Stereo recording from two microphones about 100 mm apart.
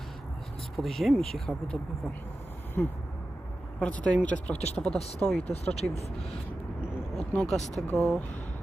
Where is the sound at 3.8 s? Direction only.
10° left (ahead or behind).